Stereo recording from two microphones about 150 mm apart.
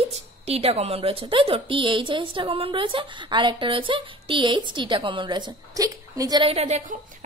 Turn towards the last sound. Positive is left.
turn(degrees=-50)  # may be behind; listen again after turning